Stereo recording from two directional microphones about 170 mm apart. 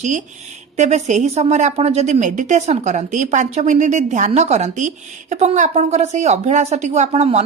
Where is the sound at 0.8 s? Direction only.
45° right (ahead or behind).